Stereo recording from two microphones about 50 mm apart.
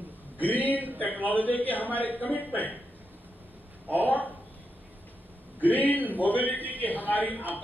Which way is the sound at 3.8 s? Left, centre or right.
Left.